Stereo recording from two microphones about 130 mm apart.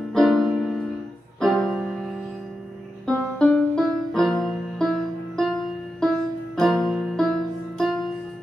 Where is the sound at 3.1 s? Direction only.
5° left (ahead or behind).